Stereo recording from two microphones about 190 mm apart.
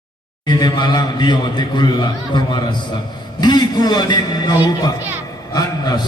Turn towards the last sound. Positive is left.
turn(degrees=20)  # may be behind; listen again after turning